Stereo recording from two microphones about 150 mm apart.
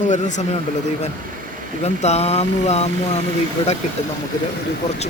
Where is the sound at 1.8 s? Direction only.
45° left (ahead or behind).